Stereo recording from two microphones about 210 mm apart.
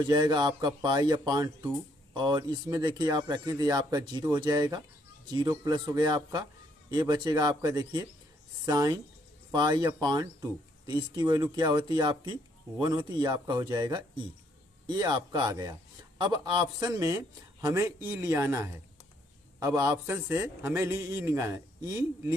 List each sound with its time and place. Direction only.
0.0 s a man's voice: 20° right (ahead or behind)